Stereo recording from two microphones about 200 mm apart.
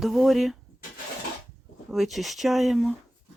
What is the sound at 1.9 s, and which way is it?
Speech, centre (ahead or behind).